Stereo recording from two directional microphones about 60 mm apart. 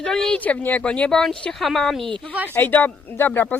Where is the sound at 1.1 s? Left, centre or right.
Centre.